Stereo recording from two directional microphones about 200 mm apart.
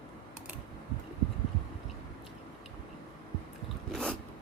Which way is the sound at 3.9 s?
5° left (ahead or behind).